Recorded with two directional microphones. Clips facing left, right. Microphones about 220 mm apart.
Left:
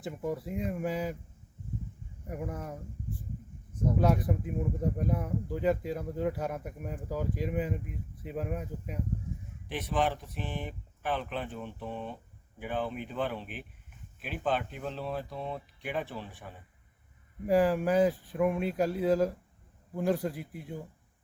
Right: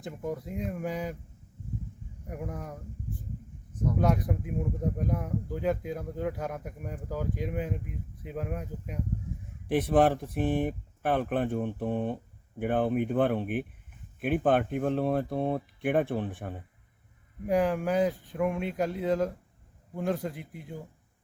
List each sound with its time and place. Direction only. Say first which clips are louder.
0.0 s speech: even; 5° left (ahead or behind)
2.2 s speech: even; centre (ahead or behind)
4.0 s speech: right 1 dB; centre (ahead or behind)
9.6 s speech: right 8 dB; 55° right (ahead or behind)
17.4 s speech: left 1 dB; centre (ahead or behind)